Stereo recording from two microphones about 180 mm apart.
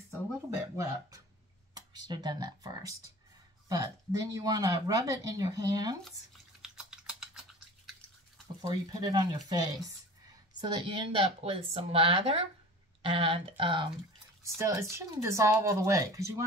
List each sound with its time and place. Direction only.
1.7 s speech: 20° right (ahead or behind)
6.6 s typing: 5° right (ahead or behind)
8.5 s speech: 20° right (ahead or behind)
14.4 s speech: 15° right (ahead or behind)